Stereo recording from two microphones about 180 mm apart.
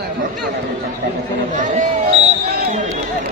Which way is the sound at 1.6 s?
45° right (ahead or behind).